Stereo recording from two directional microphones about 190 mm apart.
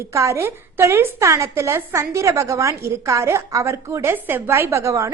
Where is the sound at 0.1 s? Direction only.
15° right (ahead or behind).